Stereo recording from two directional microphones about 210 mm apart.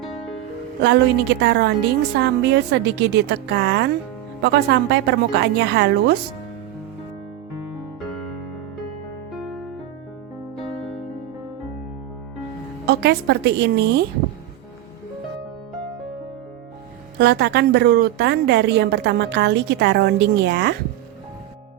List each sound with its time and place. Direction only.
0.8 s a woman's voice: 55° right (ahead or behind)
9.3 s music: centre (ahead or behind)
12.8 s a woman's voice: 50° right (ahead or behind)
17.2 s a woman's voice: 50° right (ahead or behind)